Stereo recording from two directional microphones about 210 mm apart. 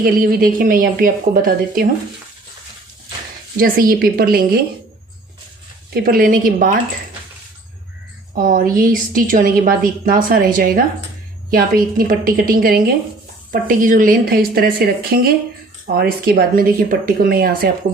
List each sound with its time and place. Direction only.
0.0 s a woman's voice: 45° right (ahead or behind)
3.6 s a woman's voice: 45° right (ahead or behind)
5.9 s a woman's voice: 45° right (ahead or behind)
8.4 s a woman's voice: 40° right (ahead or behind)